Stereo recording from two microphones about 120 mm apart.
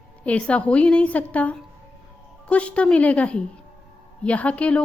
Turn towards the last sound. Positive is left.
turn(degrees=10)  # may be behind; listen again after turning